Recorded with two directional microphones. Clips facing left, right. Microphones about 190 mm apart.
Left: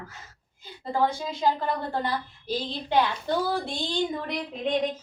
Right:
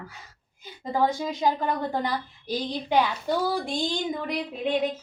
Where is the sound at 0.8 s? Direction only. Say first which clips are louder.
Right 1 dB; 15° right (ahead or behind).